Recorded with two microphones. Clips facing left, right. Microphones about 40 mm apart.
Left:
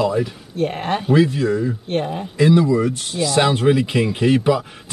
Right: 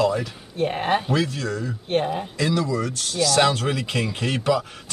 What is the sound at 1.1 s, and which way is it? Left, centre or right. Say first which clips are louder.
Speech: left 8 dB; centre.